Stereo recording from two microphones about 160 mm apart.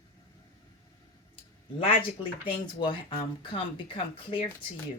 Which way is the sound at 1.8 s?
35° left (ahead or behind).